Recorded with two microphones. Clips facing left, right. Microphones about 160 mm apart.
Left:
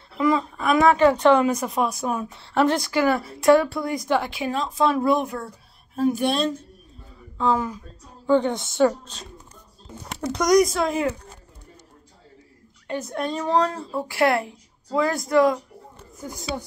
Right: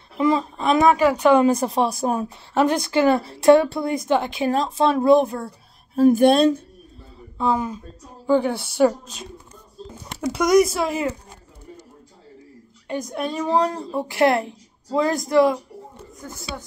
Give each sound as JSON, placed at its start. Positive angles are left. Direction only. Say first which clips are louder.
{"t": 0.1, "sound": "a sound", "louder": "right 1 dB", "side_deg": -20}
{"t": 0.9, "sound": "a woman's voice", "louder": "even", "side_deg": -10}
{"t": 1.4, "sound": "speech", "louder": "right 4 dB", "side_deg": -30}
{"t": 2.5, "sound": "speech", "louder": "right 1 dB", "side_deg": -20}
{"t": 5.9, "sound": "speech", "louder": "right 7 dB", "side_deg": -50}
{"t": 7.3, "sound": "a woman's voice", "louder": "even", "side_deg": -15}
{"t": 8.3, "sound": "a woman's voice", "louder": "right 1 dB", "side_deg": -10}
{"t": 10.3, "sound": "speech", "louder": "right 1 dB", "side_deg": -5}
{"t": 12.8, "sound": "a woman's voice", "louder": "right 1 dB", "side_deg": -15}
{"t": 15.3, "sound": "a woman's voice", "louder": "right 1 dB", "side_deg": -10}
{"t": 16.2, "sound": "speech", "louder": "left 4 dB", "side_deg": 15}